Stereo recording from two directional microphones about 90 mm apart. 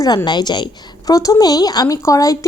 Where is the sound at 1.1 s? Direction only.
40° left (ahead or behind).